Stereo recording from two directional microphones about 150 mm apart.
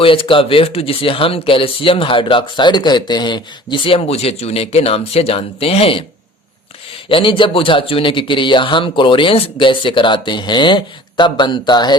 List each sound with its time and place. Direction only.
0.0 s speech: 35° left (ahead or behind)
7.1 s speech: 35° left (ahead or behind)